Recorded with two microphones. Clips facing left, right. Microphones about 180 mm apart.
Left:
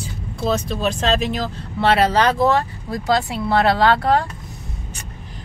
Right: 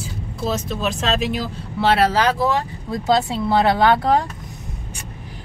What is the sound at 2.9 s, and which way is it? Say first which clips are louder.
Speech: right 1 dB; 20° right (ahead or behind).